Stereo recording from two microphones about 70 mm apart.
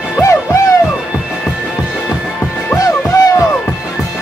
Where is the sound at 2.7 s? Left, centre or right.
Left.